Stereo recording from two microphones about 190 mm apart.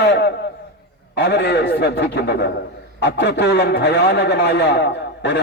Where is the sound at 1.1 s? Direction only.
65° left (ahead or behind).